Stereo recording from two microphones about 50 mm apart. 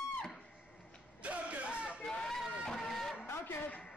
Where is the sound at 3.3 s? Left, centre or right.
Left.